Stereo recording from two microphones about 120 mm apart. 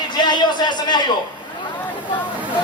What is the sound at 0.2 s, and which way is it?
Speech, 40° left (ahead or behind).